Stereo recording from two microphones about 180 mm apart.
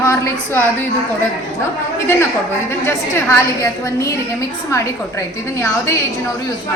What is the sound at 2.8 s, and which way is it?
A woman's voice, 15° left (ahead or behind).